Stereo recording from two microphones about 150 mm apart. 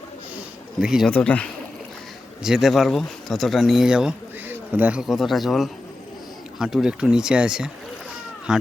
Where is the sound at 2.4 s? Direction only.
5° right (ahead or behind).